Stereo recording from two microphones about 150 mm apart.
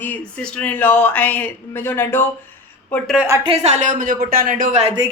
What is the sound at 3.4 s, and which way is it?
Speech, 40° right (ahead or behind).